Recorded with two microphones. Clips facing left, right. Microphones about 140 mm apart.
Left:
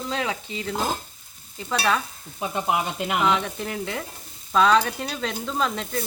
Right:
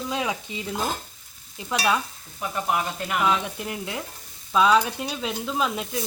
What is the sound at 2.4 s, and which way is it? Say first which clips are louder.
Speech: left 1 dB; 20° left (ahead or behind).